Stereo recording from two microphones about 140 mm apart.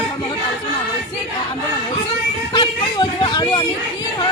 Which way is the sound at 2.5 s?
35° left (ahead or behind).